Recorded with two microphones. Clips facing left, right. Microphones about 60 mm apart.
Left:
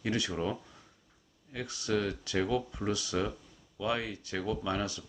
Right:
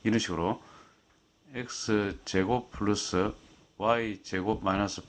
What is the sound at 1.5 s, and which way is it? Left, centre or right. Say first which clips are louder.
Speech: right 3 dB; right.